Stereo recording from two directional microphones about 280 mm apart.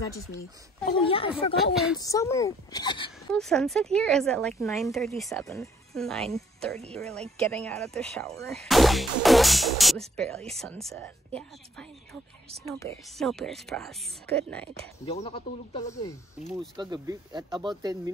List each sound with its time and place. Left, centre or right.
0.8 s speech: centre
1.6 s a woman's voice: centre
2.0 s speech: centre
3.3 s a woman's voice: centre
13.2 s a woman's voice: centre
15.0 s speech: left
16.9 s speech: centre